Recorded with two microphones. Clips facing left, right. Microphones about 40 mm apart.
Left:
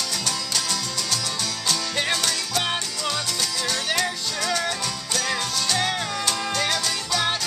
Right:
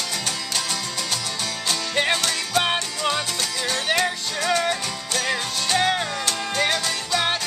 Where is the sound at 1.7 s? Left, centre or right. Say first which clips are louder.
Right 3 dB; centre.